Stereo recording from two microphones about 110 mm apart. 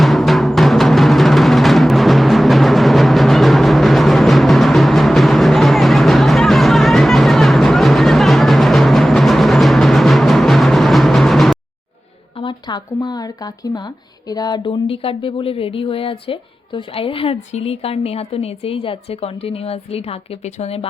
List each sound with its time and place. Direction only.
0.0 s music: centre (ahead or behind)
12.4 s speech: 45° left (ahead or behind); by 20.8 s 70° left (ahead or behind)